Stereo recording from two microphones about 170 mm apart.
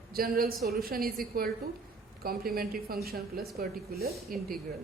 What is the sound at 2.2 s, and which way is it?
A woman's voice, 60° right (ahead or behind).